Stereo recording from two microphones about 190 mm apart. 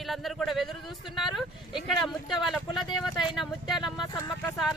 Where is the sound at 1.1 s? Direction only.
Centre (ahead or behind).